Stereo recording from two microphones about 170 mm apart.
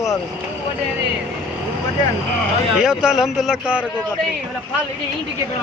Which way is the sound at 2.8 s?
5° right (ahead or behind).